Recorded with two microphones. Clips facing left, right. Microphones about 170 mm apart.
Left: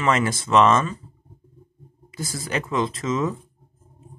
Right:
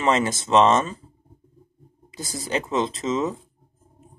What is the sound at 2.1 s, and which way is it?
Speech, 20° right (ahead or behind).